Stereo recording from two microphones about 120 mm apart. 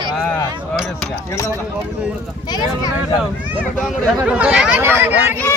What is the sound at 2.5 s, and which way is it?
Speech, 35° left (ahead or behind).